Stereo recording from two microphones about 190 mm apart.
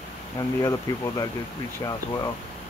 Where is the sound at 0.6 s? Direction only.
15° left (ahead or behind).